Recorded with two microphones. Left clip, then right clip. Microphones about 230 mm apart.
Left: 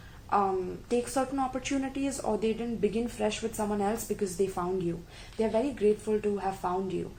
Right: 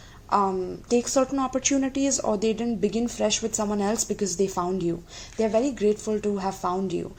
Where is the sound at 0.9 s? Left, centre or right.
Right.